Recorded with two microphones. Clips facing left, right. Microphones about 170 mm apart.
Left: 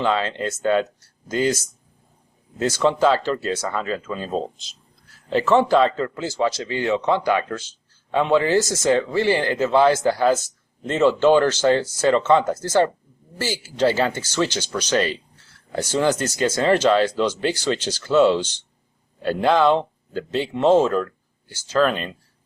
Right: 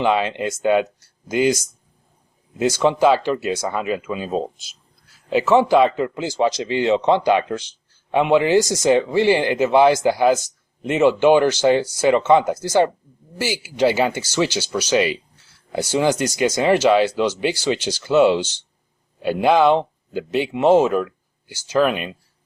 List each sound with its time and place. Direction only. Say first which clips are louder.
0.0 s speech: right 3 dB; 15° right (ahead or behind)